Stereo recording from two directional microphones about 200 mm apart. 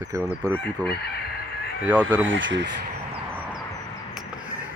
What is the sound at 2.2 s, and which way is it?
Speech, 70° right (ahead or behind).